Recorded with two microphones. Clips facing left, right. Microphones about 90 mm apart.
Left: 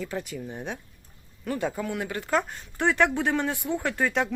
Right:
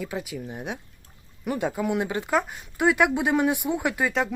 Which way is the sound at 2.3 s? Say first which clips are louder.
Right 1 dB; 5° right (ahead or behind).